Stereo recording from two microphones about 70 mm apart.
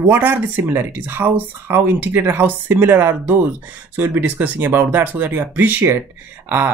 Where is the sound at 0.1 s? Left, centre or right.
Right.